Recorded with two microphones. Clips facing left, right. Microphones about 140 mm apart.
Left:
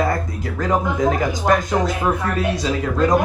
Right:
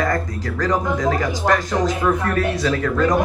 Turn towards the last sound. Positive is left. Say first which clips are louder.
# even
turn(degrees=15)  # may be behind; listen again after turning